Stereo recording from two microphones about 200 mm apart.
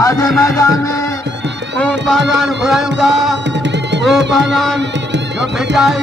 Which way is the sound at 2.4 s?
Centre (ahead or behind).